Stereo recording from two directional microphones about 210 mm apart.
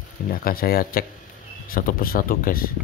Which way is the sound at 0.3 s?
45° left (ahead or behind).